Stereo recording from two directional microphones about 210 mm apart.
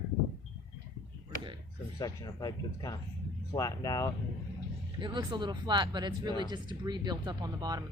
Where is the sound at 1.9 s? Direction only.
15° left (ahead or behind).